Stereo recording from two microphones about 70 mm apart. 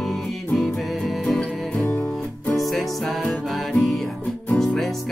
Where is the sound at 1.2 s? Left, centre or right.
Centre.